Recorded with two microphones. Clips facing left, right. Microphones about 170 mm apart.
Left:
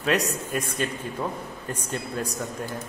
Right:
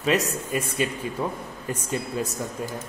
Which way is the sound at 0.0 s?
Centre (ahead or behind).